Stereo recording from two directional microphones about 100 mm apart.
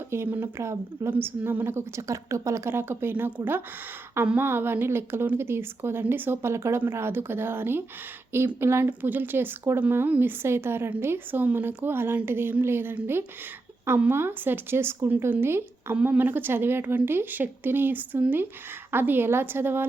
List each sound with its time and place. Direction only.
0.1 s speech: 25° right (ahead or behind)